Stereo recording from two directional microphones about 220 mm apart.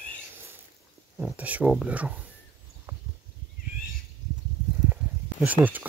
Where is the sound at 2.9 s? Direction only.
15° right (ahead or behind).